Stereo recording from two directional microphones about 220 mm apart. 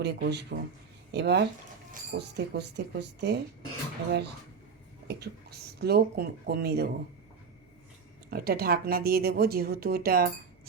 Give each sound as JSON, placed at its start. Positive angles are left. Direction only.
{"t": 0.0, "sound": "a woman's voice", "side_deg": -50}
{"t": 5.0, "sound": "a woman's voice", "side_deg": -45}
{"t": 8.3, "sound": "a woman's voice", "side_deg": -45}